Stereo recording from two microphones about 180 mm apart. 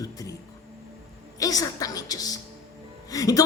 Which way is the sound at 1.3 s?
20° left (ahead or behind).